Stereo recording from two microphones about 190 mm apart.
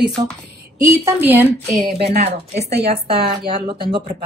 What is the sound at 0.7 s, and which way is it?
A woman's voice, 15° right (ahead or behind).